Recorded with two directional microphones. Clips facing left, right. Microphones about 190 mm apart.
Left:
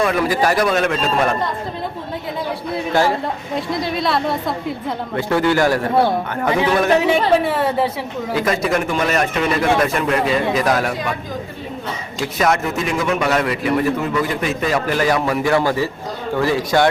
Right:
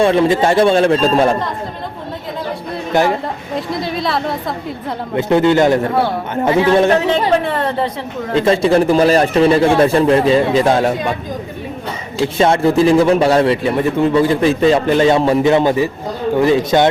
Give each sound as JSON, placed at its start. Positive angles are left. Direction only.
{"t": 0.0, "sound": "a man's voice", "side_deg": -25}
{"t": 2.9, "sound": "speech", "side_deg": -20}
{"t": 3.5, "sound": "a woman's voice", "side_deg": 0}
{"t": 5.1, "sound": "a man's voice", "side_deg": -20}
{"t": 7.3, "sound": "a woman's voice", "side_deg": 5}
{"t": 8.4, "sound": "a man's voice", "side_deg": -30}
{"t": 12.2, "sound": "a man's voice", "side_deg": -30}